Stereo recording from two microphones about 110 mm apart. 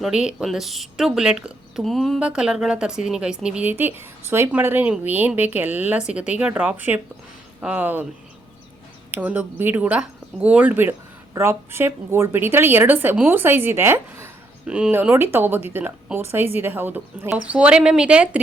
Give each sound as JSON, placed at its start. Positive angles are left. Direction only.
{"t": 0.0, "sound": "speech", "side_deg": -5}
{"t": 9.1, "sound": "a woman's voice", "side_deg": -15}
{"t": 14.7, "sound": "speech", "side_deg": -10}
{"t": 15.1, "sound": "a woman's voice", "side_deg": -20}